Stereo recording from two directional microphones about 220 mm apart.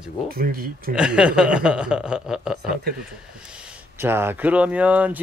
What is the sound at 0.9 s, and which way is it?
Speech, 5° right (ahead or behind).